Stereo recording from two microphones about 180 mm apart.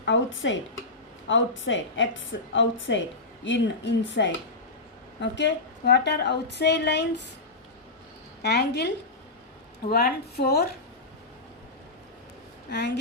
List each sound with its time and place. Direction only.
0.0 s a woman's voice: 90° left; by 7.2 s 70° left (ahead or behind)
8.4 s a woman's voice: 70° left (ahead or behind)
9.9 s a woman's voice: 60° left (ahead or behind)
12.7 s a woman's voice: 75° left (ahead or behind)